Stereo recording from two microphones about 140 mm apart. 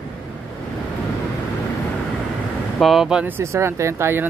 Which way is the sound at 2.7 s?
Centre (ahead or behind).